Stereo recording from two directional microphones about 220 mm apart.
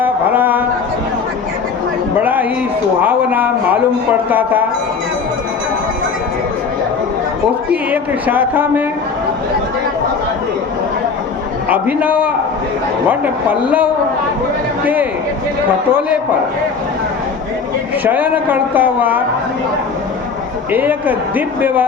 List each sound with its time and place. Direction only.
0.0 s a sound: 10° right (ahead or behind)
2.2 s a sound: 10° right (ahead or behind)
3.0 s a man's voice: 10° right (ahead or behind)
8.3 s speech: 10° right (ahead or behind)
11.7 s speech: 5° right (ahead or behind)
18.0 s speech: 10° right (ahead or behind)
20.7 s speech: 10° right (ahead or behind)